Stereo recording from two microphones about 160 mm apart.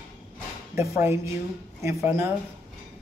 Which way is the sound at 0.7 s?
15° right (ahead or behind).